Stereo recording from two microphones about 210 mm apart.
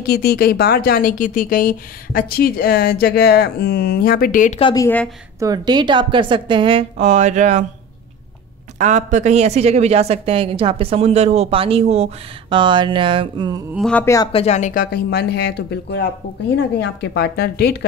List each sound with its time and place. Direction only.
0.0 s a woman's voice: 50° left (ahead or behind)
4.6 s a woman's voice: 25° left (ahead or behind)
4.8 s speech: 5° left (ahead or behind)
5.4 s speech: 20° right (ahead or behind); by 7.6 s 35° right (ahead or behind)
8.7 s speech: 35° right (ahead or behind)
13.7 s speech: 5° left (ahead or behind)
14.3 s a woman's voice: 30° left (ahead or behind); by 17.7 s 50° left (ahead or behind)